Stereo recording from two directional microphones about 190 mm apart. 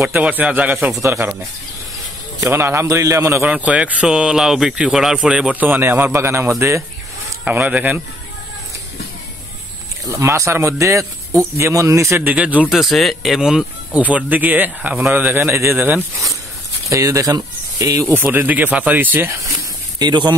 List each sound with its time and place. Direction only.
0.0 s speech: 10° right (ahead or behind)
2.4 s speech: 15° right (ahead or behind)
10.0 s speech: 15° right (ahead or behind)
20.0 s speech: 20° right (ahead or behind)